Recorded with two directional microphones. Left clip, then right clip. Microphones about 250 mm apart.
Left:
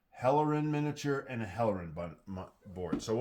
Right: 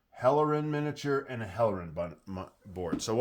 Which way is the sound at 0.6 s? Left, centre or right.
Right.